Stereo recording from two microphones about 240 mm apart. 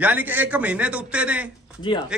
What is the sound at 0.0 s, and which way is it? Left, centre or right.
Speech, centre.